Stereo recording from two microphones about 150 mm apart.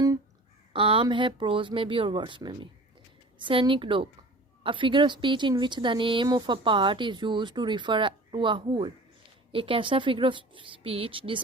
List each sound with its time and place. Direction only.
0.7 s speech: 35° right (ahead or behind)